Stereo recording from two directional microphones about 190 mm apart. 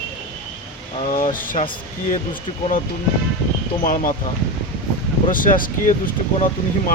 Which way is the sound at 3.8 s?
45° left (ahead or behind).